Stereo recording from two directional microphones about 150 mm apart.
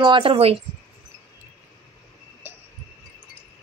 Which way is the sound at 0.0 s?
35° right (ahead or behind).